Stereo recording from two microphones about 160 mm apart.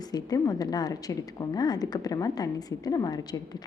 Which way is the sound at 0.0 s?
25° left (ahead or behind).